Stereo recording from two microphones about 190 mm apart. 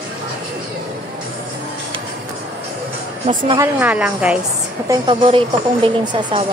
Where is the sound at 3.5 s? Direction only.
10° right (ahead or behind).